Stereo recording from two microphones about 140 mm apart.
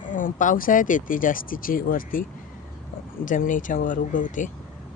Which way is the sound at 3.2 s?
70° left (ahead or behind).